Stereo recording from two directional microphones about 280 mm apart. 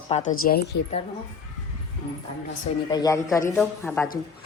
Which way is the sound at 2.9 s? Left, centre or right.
Centre.